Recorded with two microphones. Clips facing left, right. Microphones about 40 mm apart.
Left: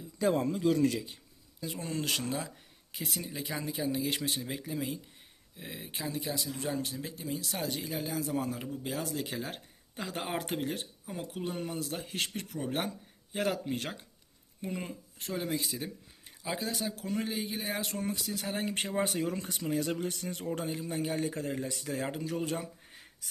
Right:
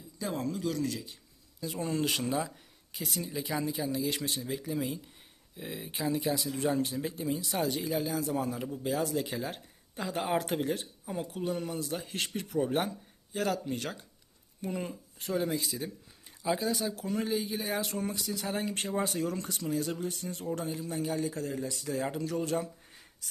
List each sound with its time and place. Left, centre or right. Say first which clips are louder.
0.3 s speech: left 1 dB; left
1.7 s speech: right 3 dB; centre
4.3 s speech: right 1 dB; centre
4.6 s speech: right 2 dB; centre
7.3 s speech: right 1 dB; centre
11.3 s speech: right 1 dB; centre
13.4 s speech: even; left
14.7 s speech: right 3 dB; centre
18.6 s speech: even; left
19.5 s speech: left 2 dB; left
19.8 s speech: left 1 dB; left
20.6 s speech: even; left
22.0 s speech: right 1 dB; centre
22.5 s a sound: right 5 dB; centre